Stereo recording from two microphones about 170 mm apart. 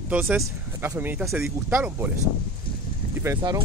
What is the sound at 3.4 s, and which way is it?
Speech, 25° right (ahead or behind).